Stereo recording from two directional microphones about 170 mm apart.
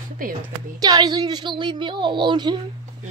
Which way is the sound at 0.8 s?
25° right (ahead or behind).